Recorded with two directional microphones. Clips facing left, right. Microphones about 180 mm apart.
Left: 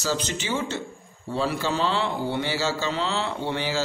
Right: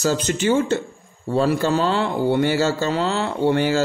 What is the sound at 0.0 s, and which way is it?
Speech, 50° right (ahead or behind).